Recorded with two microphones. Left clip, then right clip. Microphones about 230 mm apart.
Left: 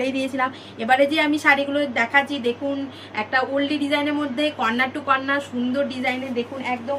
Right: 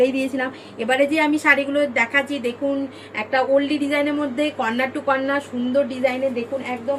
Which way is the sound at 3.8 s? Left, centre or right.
Centre.